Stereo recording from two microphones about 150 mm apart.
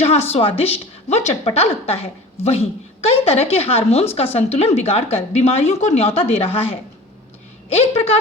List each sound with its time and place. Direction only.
0.0 s a woman's voice: 45° left (ahead or behind)